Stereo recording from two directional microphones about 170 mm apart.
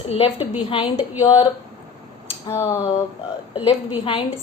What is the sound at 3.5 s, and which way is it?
Speech, 30° left (ahead or behind).